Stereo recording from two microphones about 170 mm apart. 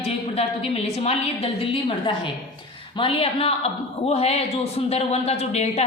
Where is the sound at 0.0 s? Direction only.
35° left (ahead or behind).